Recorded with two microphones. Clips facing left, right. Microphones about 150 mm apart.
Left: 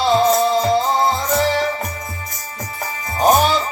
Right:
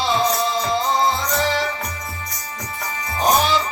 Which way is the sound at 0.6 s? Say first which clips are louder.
Left 3 dB; 45° left (ahead or behind).